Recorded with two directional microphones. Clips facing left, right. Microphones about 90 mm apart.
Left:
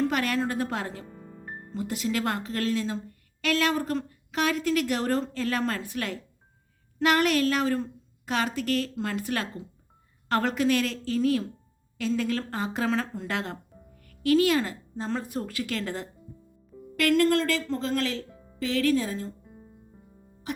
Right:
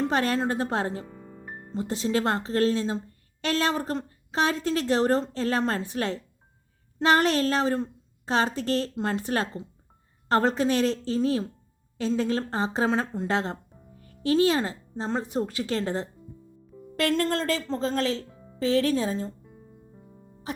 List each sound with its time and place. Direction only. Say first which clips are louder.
0.0 s a woman's voice: right 1 dB; 30° right (ahead or behind)